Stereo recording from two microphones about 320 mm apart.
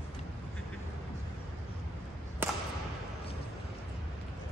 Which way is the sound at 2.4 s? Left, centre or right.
Centre.